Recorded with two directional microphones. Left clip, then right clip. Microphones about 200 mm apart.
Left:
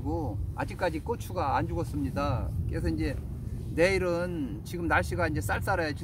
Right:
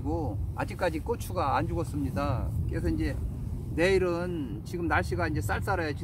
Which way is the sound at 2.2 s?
25° left (ahead or behind).